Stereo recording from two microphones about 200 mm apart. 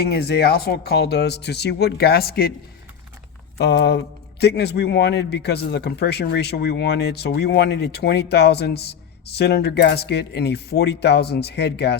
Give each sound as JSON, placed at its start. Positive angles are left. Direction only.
{"t": 0.1, "sound": "speech", "side_deg": 55}
{"t": 3.6, "sound": "a man's voice", "side_deg": 55}